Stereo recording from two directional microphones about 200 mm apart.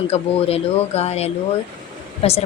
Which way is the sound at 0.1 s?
30° left (ahead or behind).